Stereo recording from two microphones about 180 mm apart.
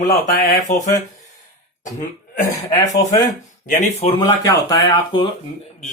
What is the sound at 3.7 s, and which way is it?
Speech, 45° left (ahead or behind).